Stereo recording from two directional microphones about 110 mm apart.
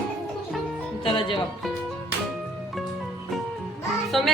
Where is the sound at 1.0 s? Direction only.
55° left (ahead or behind).